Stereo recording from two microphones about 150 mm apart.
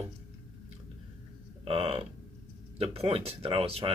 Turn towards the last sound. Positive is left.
turn(degrees=-40)  # may be behind; listen again after turning